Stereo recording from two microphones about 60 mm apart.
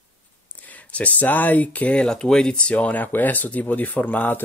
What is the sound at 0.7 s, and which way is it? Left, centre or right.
Speech, left.